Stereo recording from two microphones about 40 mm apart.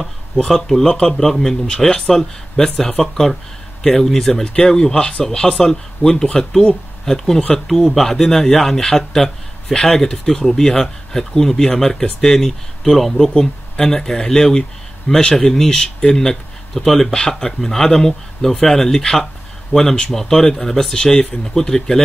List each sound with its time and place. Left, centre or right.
0.6 s speech: centre
4.3 s speech: centre
13.2 s speech: centre